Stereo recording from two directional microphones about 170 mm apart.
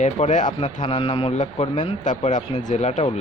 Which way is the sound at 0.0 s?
45° left (ahead or behind).